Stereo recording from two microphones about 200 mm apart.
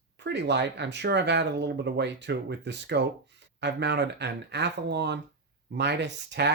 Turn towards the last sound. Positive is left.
turn(degrees=-60)  # may be behind; listen again after turning